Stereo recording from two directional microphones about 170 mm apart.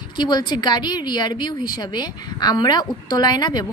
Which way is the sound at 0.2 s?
25° left (ahead or behind).